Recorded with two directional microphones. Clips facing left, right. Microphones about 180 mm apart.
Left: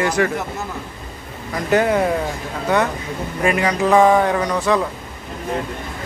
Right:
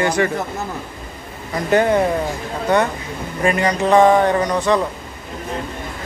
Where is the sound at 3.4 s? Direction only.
5° left (ahead or behind).